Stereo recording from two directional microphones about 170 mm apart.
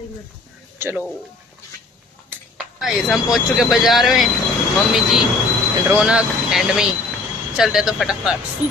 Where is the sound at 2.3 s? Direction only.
5° right (ahead or behind).